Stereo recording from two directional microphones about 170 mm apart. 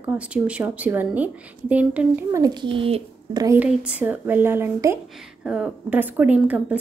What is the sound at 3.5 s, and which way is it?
A woman's voice, 5° right (ahead or behind).